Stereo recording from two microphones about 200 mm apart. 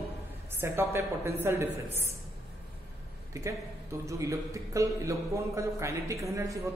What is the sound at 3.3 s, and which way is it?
A man's voice, 15° right (ahead or behind).